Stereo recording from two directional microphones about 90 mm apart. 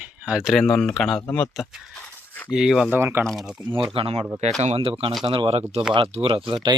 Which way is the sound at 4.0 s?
90° right.